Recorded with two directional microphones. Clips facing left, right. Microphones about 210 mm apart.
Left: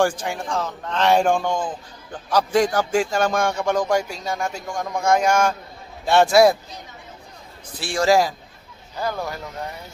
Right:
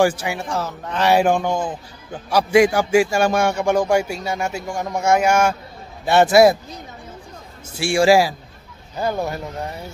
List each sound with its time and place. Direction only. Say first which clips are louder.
0.0 s a man's voice: right 3 dB; 10° right (ahead or behind)
7.7 s a man's voice: right 4 dB; 10° right (ahead or behind)
8.9 s speech: right 4 dB; 25° right (ahead or behind)